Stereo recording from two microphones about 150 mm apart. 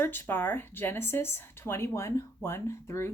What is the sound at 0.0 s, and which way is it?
Speech, 15° left (ahead or behind).